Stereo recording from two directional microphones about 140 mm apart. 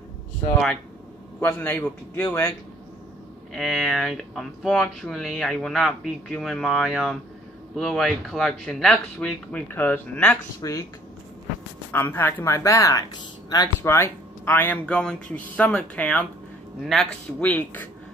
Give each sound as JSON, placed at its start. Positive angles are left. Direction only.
{"t": 1.4, "sound": "speech", "side_deg": 15}
{"t": 3.5, "sound": "speech", "side_deg": 0}
{"t": 9.7, "sound": "speech", "side_deg": 15}
{"t": 10.6, "sound": "speech", "side_deg": 25}
{"t": 11.9, "sound": "speech", "side_deg": 15}